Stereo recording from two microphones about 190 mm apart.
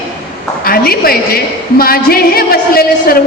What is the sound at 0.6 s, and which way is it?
A man's voice, 50° left (ahead or behind).